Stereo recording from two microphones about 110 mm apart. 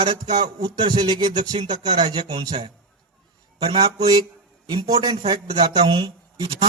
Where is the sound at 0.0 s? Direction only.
40° right (ahead or behind).